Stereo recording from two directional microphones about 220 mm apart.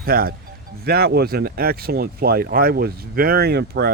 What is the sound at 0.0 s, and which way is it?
Speech, 40° right (ahead or behind).